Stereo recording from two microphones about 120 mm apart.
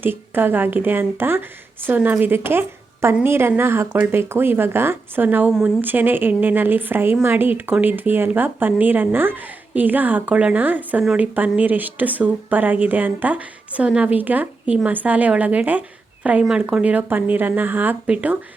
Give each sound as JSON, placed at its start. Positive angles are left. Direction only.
{"t": 0.0, "sound": "speech", "side_deg": -15}